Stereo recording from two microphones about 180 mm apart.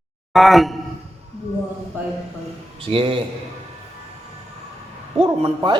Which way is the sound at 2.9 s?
30° right (ahead or behind).